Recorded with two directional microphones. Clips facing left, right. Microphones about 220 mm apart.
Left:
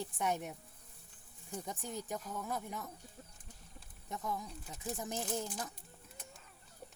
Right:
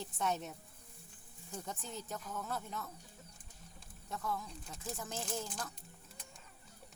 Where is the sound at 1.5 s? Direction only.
15° left (ahead or behind).